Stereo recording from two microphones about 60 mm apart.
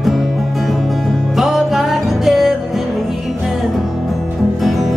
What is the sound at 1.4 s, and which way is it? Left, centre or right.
Music, centre.